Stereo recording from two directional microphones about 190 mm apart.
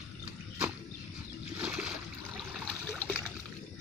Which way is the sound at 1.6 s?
5° right (ahead or behind).